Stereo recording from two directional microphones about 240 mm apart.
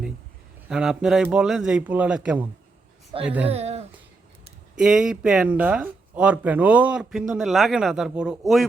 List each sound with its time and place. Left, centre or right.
0.7 s speech: centre
3.5 s a sound: right
4.8 s speech: centre